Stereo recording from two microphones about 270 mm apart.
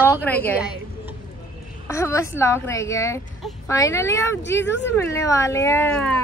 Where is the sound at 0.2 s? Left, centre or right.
Centre.